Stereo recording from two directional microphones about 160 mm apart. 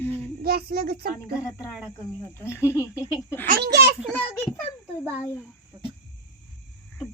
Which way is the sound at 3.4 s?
80° right.